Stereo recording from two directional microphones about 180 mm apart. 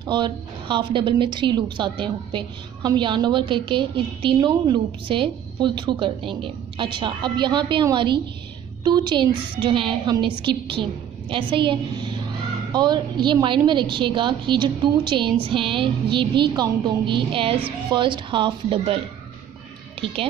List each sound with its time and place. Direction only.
0.0 s a woman's voice: 25° right (ahead or behind)